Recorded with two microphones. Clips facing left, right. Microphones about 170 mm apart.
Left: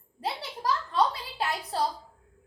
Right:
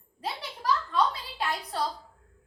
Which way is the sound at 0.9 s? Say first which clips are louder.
Left 1 dB; 30° left (ahead or behind).